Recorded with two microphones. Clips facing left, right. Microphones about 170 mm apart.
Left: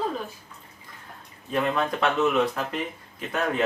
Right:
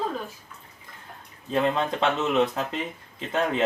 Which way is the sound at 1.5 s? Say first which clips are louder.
Right 1 dB; 25° right (ahead or behind).